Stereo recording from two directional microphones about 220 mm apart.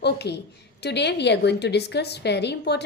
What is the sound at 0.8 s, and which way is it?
A woman's voice, 50° left (ahead or behind).